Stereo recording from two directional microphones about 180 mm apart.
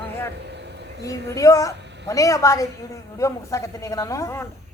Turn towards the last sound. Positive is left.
turn(degrees=15)  # may be behind; listen again after turning